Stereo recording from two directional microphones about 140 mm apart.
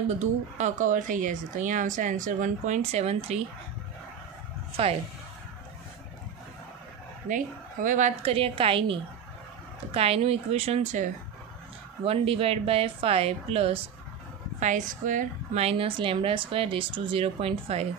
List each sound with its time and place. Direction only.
0.6 s speech: 65° right (ahead or behind)
4.8 s speech: 40° right (ahead or behind)
7.2 s a woman's voice: 70° right (ahead or behind)
8.2 s speech: 40° right (ahead or behind)
9.9 s a woman's voice: 45° right (ahead or behind)
12.0 s a woman's voice: 45° right (ahead or behind)
14.6 s speech: 65° right (ahead or behind)
15.6 s speech: 45° right (ahead or behind)